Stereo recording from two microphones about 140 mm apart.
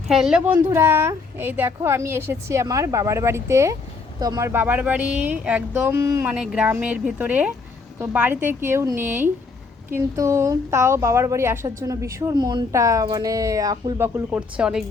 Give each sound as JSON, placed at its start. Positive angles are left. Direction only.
{"t": 0.1, "sound": "a woman's voice", "side_deg": -5}
{"t": 14.0, "sound": "a woman's voice", "side_deg": -10}